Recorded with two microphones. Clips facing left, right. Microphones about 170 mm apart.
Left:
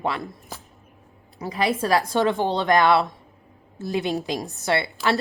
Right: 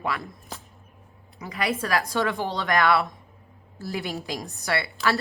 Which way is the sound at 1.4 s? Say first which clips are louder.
Left 4 dB; 30° left (ahead or behind).